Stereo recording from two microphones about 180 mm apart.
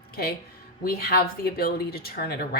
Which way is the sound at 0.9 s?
60° left (ahead or behind).